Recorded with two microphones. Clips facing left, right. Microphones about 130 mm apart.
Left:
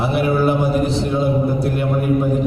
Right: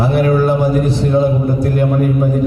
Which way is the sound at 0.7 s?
25° left (ahead or behind).